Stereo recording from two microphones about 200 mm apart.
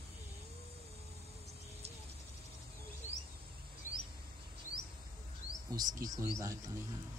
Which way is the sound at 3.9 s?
40° left (ahead or behind).